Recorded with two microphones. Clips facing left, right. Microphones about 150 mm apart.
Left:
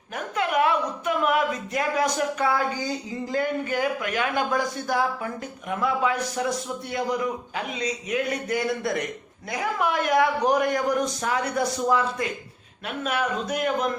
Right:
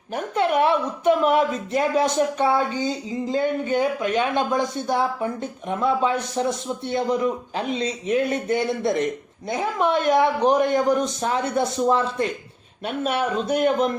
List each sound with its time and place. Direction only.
0.1 s a woman's voice: 30° right (ahead or behind)